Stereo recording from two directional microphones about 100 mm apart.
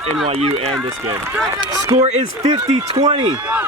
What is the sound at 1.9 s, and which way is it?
Speech, 90° right.